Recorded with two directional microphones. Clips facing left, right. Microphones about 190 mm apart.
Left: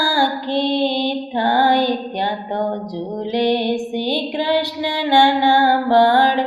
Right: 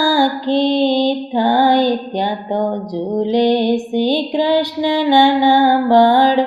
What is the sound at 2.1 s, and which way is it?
Music, 15° right (ahead or behind).